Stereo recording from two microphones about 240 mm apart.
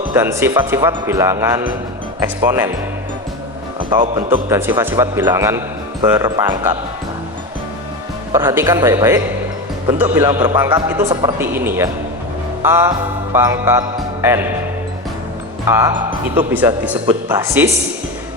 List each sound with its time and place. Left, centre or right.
0.1 s a man's voice: centre
3.8 s speech: right
4.3 s a man's voice: centre
8.3 s a man's voice: centre
12.6 s music: centre
15.6 s a man's voice: centre